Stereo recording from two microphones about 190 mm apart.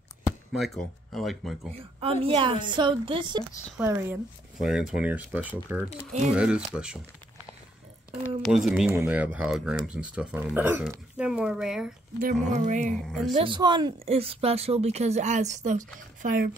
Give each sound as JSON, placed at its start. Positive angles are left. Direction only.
{"t": 0.5, "sound": "speech", "side_deg": 0}
{"t": 1.8, "sound": "a woman's voice", "side_deg": -30}
{"t": 3.7, "sound": "speech", "side_deg": -10}
{"t": 8.4, "sound": "speech", "side_deg": 0}
{"t": 12.5, "sound": "speech", "side_deg": -40}
{"t": 12.9, "sound": "speech", "side_deg": 0}
{"t": 13.3, "sound": "speech", "side_deg": -25}